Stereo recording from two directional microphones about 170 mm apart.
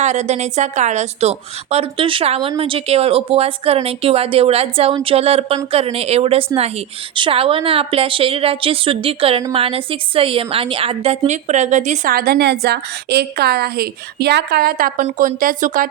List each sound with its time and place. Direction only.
0.0 s a woman's voice: 45° right (ahead or behind)
12.1 s a woman's voice: 65° right (ahead or behind)